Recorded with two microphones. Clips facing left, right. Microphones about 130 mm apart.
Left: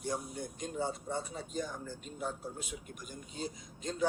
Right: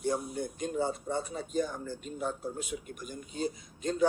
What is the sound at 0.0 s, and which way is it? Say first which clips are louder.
Speech: right 6 dB; 60° right (ahead or behind).